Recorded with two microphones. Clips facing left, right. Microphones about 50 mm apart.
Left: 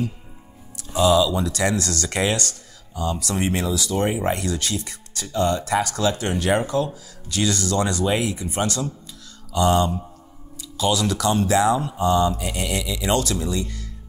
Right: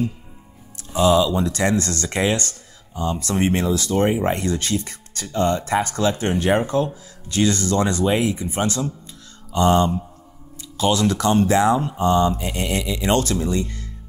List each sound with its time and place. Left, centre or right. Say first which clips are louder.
0.8 s speech: right 1 dB; right
2.4 s speech: left 1 dB; right
4.1 s speech: right 3 dB; right